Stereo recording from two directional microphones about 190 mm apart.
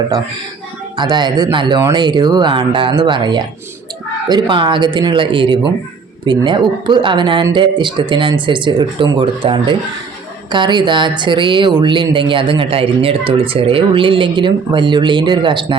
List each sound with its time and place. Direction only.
0.9 s speech: 25° right (ahead or behind)